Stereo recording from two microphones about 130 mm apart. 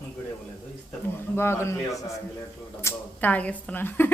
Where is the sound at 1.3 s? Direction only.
20° left (ahead or behind).